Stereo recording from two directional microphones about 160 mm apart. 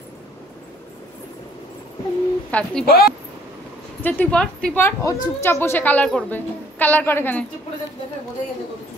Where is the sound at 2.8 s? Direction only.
70° left (ahead or behind).